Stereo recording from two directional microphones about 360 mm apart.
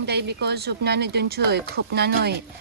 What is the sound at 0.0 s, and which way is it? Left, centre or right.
Speech, right.